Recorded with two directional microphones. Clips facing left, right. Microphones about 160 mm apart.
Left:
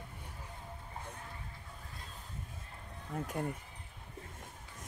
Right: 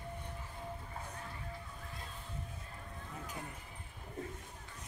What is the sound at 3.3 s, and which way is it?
Speech, 50° left (ahead or behind).